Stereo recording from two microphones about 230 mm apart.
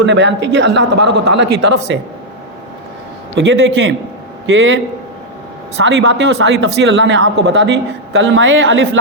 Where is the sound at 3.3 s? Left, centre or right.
Right.